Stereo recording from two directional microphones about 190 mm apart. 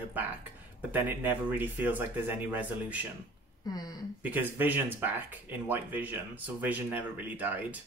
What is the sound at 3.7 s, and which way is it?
Speech, 20° left (ahead or behind).